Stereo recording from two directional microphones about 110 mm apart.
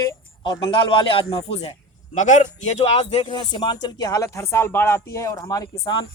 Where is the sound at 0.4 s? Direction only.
45° left (ahead or behind).